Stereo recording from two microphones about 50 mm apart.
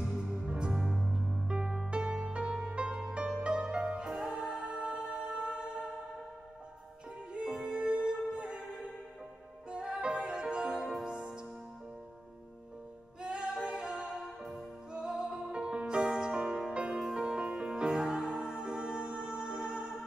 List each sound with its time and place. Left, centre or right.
0.2 s music: centre
0.8 s music: centre
1.1 s music: centre
7.3 s music: centre
9.7 s music: centre
13.2 s music: centre
14.2 s music: centre
14.9 s music: centre